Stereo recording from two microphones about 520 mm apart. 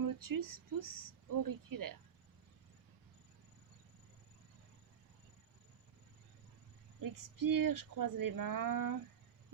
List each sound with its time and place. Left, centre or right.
0.0 s speech: right
7.0 s speech: right